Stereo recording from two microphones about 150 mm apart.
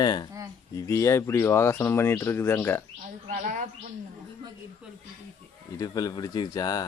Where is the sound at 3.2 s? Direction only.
60° right (ahead or behind).